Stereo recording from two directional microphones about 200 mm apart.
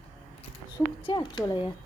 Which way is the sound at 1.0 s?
20° left (ahead or behind).